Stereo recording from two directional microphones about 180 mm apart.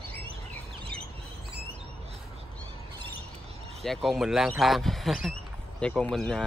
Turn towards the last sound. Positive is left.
turn(degrees=5)  # may be behind; listen again after turning